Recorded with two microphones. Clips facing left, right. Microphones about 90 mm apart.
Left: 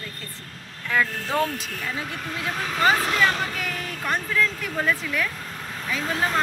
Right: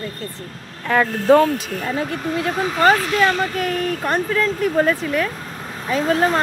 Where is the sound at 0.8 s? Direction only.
50° right (ahead or behind).